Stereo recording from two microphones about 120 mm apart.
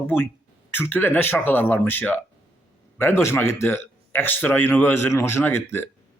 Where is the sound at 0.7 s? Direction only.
15° left (ahead or behind).